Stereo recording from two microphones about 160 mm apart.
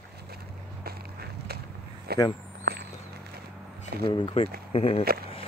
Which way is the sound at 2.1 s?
80° right.